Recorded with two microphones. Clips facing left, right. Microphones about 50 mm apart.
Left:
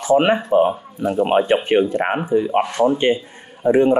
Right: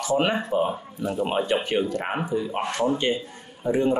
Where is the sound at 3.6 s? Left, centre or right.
Left.